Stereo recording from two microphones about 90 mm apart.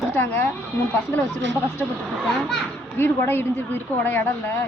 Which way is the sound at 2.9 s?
25° left (ahead or behind).